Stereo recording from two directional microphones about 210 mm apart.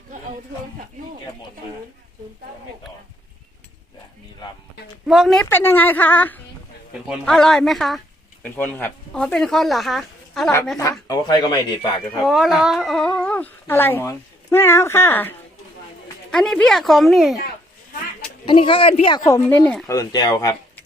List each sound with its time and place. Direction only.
5.0 s speech: centre (ahead or behind)
11.1 s speech: 20° left (ahead or behind)
12.2 s speech: centre (ahead or behind)
18.4 s speech: 25° left (ahead or behind); by 20.0 s 5° left (ahead or behind)
20.0 s speech: 20° left (ahead or behind)